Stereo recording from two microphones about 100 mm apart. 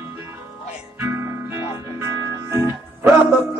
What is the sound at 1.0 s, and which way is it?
Music, 25° right (ahead or behind).